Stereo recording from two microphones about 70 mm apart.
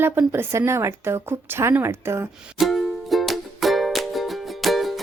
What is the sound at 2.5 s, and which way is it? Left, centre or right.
Music, centre.